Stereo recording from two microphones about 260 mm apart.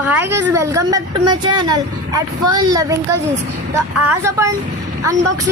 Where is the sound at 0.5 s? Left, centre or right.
Centre.